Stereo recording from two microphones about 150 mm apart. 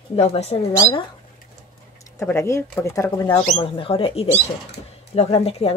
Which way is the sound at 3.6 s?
35° left (ahead or behind).